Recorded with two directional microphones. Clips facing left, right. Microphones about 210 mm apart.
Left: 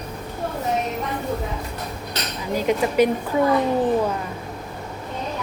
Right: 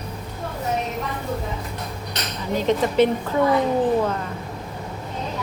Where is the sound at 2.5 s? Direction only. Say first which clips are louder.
Even; 10° left (ahead or behind).